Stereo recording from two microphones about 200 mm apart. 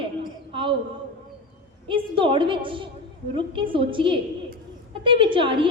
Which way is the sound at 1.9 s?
25° right (ahead or behind).